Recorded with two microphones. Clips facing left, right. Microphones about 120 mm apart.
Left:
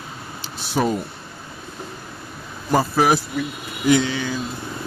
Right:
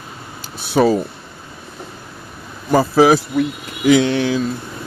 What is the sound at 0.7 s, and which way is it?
Speech, 70° right (ahead or behind).